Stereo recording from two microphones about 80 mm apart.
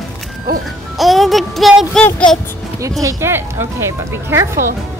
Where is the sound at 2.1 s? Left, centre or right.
Centre.